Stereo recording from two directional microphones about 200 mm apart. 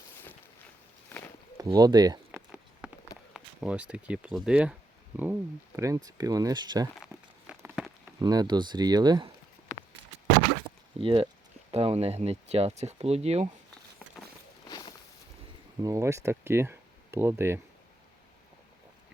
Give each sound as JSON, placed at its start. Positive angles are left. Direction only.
{"t": 1.5, "sound": "speech", "side_deg": -15}
{"t": 2.8, "sound": "walk", "side_deg": -5}
{"t": 3.3, "sound": "speech", "side_deg": -5}
{"t": 7.0, "sound": "crumpling", "side_deg": -5}
{"t": 8.2, "sound": "speech", "side_deg": -20}
{"t": 10.9, "sound": "a sound", "side_deg": -25}
{"t": 11.7, "sound": "speech", "side_deg": -30}
{"t": 14.7, "sound": "a sound", "side_deg": 20}
{"t": 15.8, "sound": "speech", "side_deg": -15}